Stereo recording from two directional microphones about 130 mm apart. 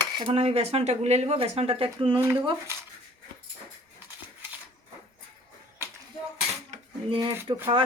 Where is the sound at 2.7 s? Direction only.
20° right (ahead or behind).